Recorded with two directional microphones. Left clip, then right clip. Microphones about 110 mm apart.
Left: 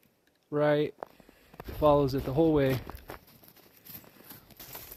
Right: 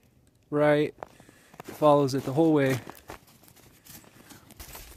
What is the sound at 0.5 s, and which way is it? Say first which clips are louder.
Speech: right 3 dB; 90° right.